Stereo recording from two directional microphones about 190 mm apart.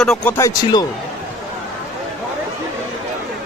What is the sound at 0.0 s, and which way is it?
Speech, centre (ahead or behind).